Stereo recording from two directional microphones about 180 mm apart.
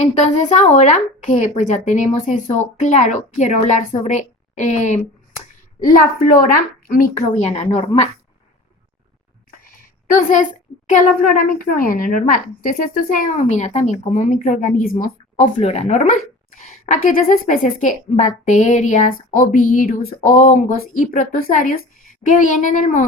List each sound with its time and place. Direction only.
0.0 s a woman's voice: 40° left (ahead or behind)
10.1 s speech: 50° left (ahead or behind)
15.5 s speech: 35° left (ahead or behind)